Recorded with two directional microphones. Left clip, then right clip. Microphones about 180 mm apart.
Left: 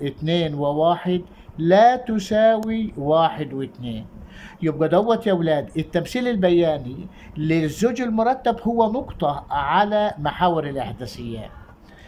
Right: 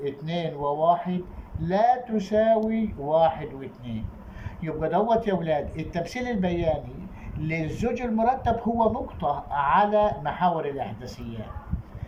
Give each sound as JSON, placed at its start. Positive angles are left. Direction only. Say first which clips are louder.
{"t": 0.0, "sound": "speech", "louder": "left 6 dB", "side_deg": 55}